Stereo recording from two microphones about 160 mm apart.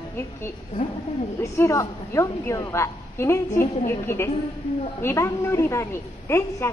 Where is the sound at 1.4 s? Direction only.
20° left (ahead or behind).